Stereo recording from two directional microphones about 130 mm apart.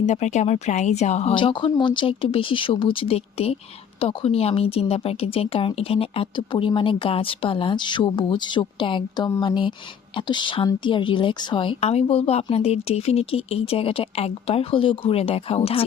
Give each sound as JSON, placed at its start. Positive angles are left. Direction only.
{"t": 0.0, "sound": "speech", "side_deg": 60}
{"t": 1.3, "sound": "speech", "side_deg": 40}